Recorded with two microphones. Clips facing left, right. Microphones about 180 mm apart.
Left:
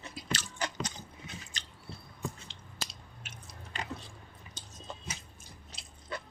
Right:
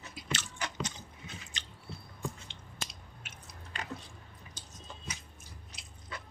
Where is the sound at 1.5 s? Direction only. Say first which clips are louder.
Even; 40° left (ahead or behind).